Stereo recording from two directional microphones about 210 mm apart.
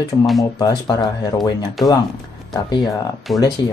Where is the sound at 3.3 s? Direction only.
Centre (ahead or behind).